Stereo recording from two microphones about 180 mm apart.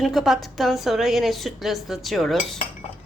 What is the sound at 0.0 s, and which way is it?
A woman's voice, centre (ahead or behind).